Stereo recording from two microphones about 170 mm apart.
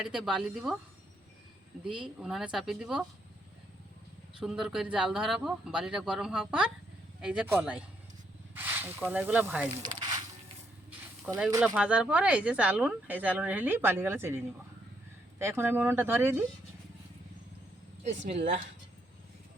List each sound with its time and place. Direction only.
0.0 s speech: 5° right (ahead or behind)
1.8 s speech: 5° right (ahead or behind)
4.4 s speech: 5° right (ahead or behind)
9.8 s a sound: 25° right (ahead or behind)
11.6 s speech: 5° right (ahead or behind)